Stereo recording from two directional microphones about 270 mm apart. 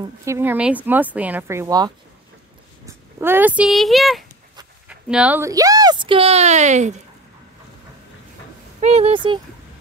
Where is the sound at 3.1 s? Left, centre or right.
Centre; by 7.0 s right.